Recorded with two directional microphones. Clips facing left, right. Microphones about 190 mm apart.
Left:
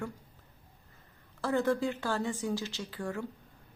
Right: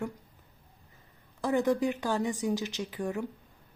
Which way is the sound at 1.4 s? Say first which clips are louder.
Right 2 dB; 15° right (ahead or behind).